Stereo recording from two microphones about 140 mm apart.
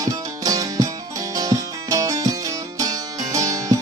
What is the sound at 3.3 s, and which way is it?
Music, 25° right (ahead or behind).